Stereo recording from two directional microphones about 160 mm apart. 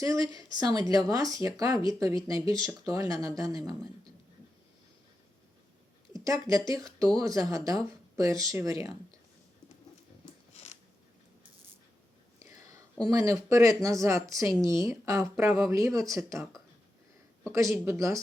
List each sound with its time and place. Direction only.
0.0 s speech: 20° right (ahead or behind)
6.2 s speech: 20° right (ahead or behind)
10.5 s a sound: 45° left (ahead or behind)
12.6 s a sound: 20° right (ahead or behind)
13.5 s speech: 20° right (ahead or behind)
17.5 s speech: 20° right (ahead or behind)